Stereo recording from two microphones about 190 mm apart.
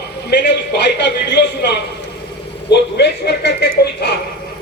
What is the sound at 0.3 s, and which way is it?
A man's voice, 60° left (ahead or behind).